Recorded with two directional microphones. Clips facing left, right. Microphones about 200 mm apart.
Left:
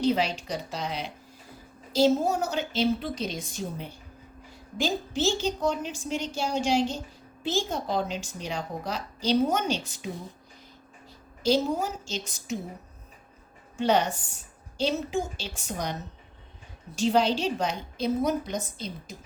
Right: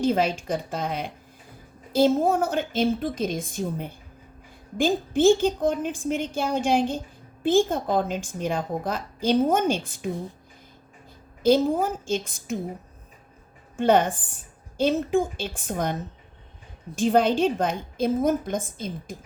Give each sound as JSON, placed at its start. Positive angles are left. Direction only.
{"t": 0.0, "sound": "a woman's voice", "side_deg": -50}
{"t": 11.4, "sound": "a woman's voice", "side_deg": -55}
{"t": 13.7, "sound": "a woman's voice", "side_deg": -50}